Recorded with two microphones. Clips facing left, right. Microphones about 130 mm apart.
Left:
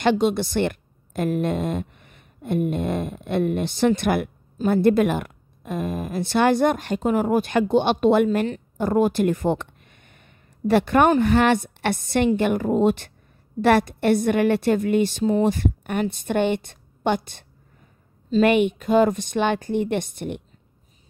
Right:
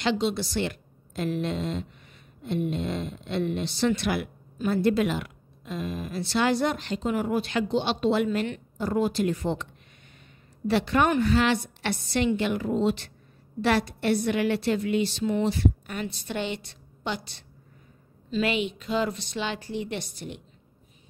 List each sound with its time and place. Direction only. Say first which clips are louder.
0.0 s speech: left 6 dB; 55° left (ahead or behind)
10.7 s speech: left 6 dB; 50° left (ahead or behind)